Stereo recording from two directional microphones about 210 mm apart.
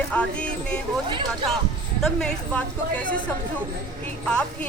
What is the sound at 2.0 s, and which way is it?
Speech, 5° left (ahead or behind).